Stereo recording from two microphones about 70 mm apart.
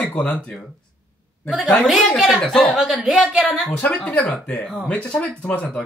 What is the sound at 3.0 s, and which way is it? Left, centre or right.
Speech, centre.